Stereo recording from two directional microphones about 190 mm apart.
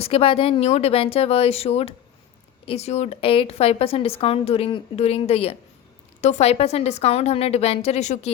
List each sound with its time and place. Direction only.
0.0 s a woman's voice: 30° left (ahead or behind)